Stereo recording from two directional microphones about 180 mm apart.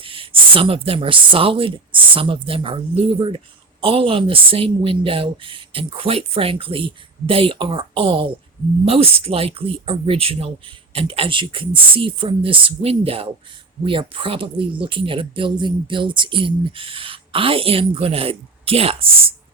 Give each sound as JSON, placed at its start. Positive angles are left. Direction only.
{"t": 0.0, "sound": "speech", "side_deg": -30}